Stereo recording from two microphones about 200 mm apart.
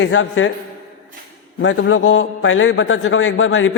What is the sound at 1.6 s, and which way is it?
A man's voice, 80° left.